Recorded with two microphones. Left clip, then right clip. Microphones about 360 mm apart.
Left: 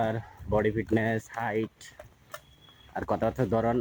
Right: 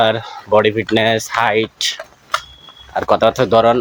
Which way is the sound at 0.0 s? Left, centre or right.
Left.